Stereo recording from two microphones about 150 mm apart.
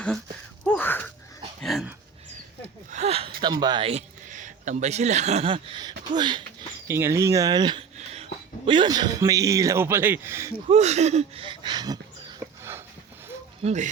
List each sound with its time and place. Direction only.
0.6 s a sound: 10° left (ahead or behind)
1.6 s speech: centre (ahead or behind)
2.9 s speech: 45° right (ahead or behind)
4.3 s speech: 55° right (ahead or behind); by 6.4 s 30° right (ahead or behind)
6.8 s speech: 15° right (ahead or behind)
7.9 s speech: 45° right (ahead or behind); by 10.5 s 15° right (ahead or behind)
10.7 s speech: 50° right (ahead or behind)
11.4 s speech: 30° right (ahead or behind)
12.4 s a sound: 15° right (ahead or behind)
13.7 s speech: 55° right (ahead or behind)